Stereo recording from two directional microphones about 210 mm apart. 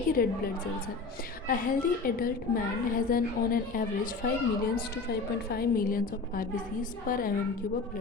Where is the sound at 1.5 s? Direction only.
40° left (ahead or behind).